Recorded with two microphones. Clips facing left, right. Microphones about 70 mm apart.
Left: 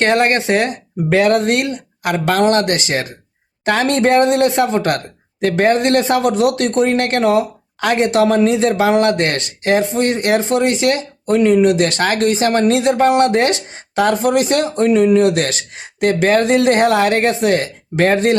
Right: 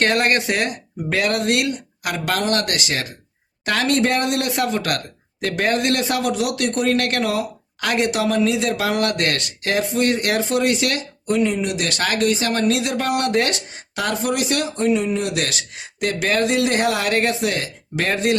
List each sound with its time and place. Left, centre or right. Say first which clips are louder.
0.0 s speech: left 4 dB; left
11.3 s speech: left 8 dB; left
14.8 s speech: left 9 dB; left
15.3 s speech: left 7 dB; left